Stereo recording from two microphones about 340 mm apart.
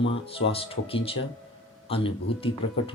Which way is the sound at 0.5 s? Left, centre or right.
Centre.